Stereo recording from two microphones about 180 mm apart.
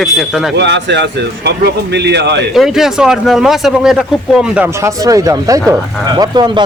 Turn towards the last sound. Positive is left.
turn(degrees=-25)  # may be behind; listen again after turning